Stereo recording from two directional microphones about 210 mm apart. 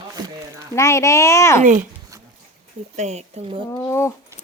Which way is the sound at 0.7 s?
15° left (ahead or behind).